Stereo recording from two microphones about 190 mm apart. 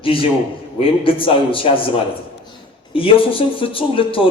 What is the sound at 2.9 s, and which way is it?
A man's voice, 30° left (ahead or behind).